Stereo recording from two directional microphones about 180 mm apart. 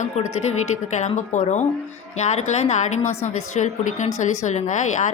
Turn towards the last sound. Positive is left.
turn(degrees=45)  # may be behind; listen again after turning